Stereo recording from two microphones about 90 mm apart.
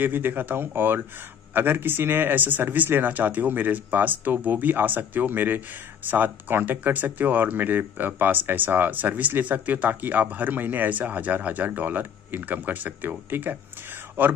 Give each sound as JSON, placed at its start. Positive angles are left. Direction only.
{"t": 0.0, "sound": "speech", "side_deg": -20}